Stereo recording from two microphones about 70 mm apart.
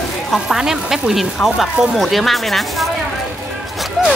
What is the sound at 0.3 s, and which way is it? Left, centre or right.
Speech, centre.